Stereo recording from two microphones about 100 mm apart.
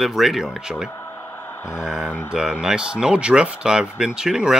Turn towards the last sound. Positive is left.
turn(degrees=-5)  # may be behind; listen again after turning